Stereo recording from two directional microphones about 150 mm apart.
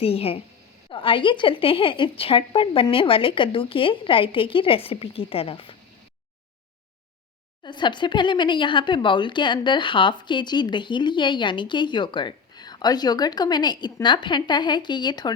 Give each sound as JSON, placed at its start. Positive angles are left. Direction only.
{"t": 0.0, "sound": "speech", "side_deg": 40}
{"t": 7.6, "sound": "speech", "side_deg": 30}